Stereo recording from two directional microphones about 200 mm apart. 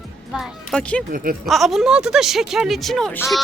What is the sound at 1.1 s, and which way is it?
Speech, 45° right (ahead or behind).